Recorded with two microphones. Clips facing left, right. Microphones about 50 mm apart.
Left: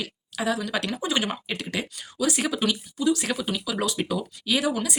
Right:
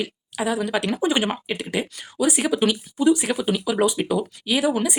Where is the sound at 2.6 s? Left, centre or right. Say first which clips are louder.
Right 6 dB; right.